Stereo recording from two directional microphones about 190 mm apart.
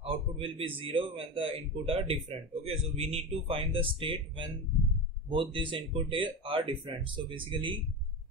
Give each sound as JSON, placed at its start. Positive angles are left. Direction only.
{"t": 0.0, "sound": "a man's voice", "side_deg": -30}